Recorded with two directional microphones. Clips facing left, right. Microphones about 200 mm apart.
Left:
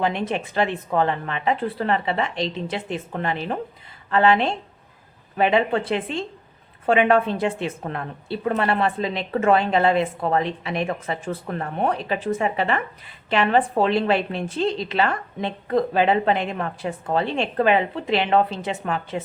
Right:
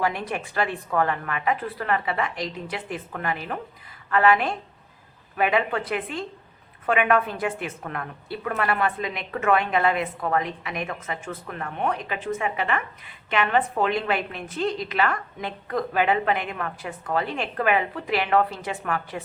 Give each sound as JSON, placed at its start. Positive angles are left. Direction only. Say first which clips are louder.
{"t": 0.0, "sound": "a woman's voice", "louder": "left 3 dB", "side_deg": 25}